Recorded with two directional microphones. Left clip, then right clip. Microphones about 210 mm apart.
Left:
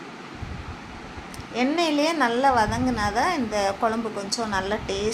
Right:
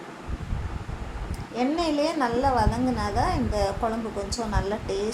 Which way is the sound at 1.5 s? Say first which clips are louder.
Left 2 dB; 20° left (ahead or behind).